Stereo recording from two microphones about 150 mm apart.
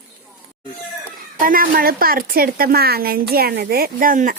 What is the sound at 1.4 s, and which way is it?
A woman's voice, 70° right (ahead or behind).